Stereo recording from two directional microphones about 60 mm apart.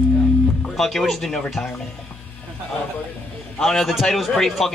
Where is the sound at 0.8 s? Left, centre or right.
Centre.